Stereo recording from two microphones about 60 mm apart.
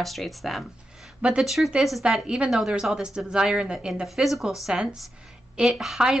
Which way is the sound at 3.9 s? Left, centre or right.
Centre.